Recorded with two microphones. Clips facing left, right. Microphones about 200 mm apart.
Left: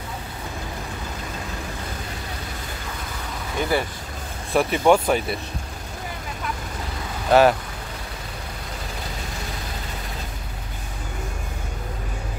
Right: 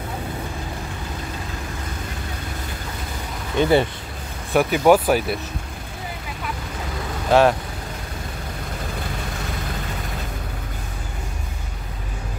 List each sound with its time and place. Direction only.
3.5 s speech: 25° right (ahead or behind)
4.5 s speech: centre (ahead or behind)
7.2 s speech: centre (ahead or behind)